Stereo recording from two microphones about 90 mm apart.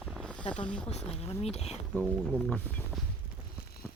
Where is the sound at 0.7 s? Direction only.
10° left (ahead or behind).